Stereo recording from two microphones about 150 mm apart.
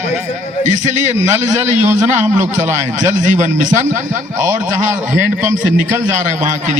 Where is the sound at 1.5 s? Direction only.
15° right (ahead or behind).